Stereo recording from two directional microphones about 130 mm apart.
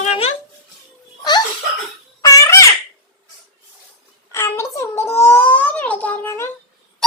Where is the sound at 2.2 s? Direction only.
25° left (ahead or behind).